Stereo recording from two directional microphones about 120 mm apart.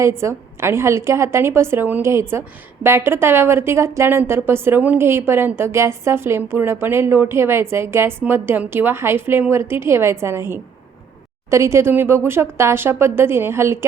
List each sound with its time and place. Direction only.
0.0 s a woman's voice: 25° right (ahead or behind)